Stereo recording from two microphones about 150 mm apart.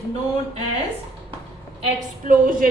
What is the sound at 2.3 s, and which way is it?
Speech, 65° right (ahead or behind).